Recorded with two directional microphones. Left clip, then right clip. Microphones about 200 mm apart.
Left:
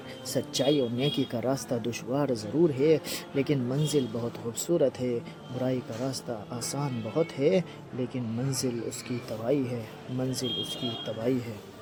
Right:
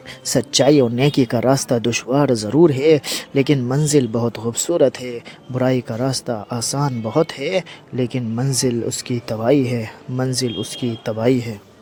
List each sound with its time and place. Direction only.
0.3 s speech: 40° right (ahead or behind)